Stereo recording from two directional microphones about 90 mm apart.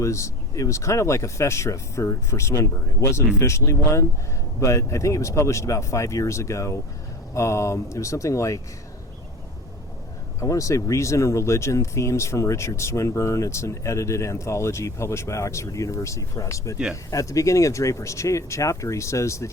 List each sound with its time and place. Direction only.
0.0 s speech: 35° left (ahead or behind)
10.4 s speech: 35° left (ahead or behind)